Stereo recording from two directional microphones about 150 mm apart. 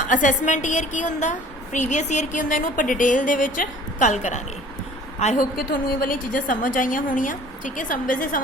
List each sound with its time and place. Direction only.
0.0 s a woman's voice: 60° left (ahead or behind)
5.5 s a woman's voice: 75° left (ahead or behind)